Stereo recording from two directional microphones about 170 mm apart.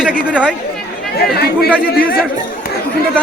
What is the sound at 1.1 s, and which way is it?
Speech, 70° left (ahead or behind).